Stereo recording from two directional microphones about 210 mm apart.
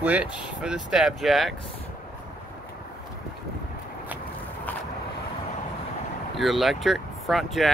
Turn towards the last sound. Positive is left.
turn(degrees=0)  # may be behind; listen again after turning